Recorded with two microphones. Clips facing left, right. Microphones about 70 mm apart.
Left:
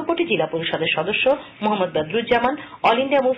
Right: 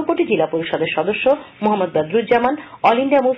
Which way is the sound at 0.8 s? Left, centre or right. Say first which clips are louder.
Right 3 dB; right.